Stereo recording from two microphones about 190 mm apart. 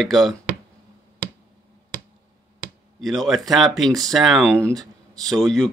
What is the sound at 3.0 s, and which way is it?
Speech, centre (ahead or behind).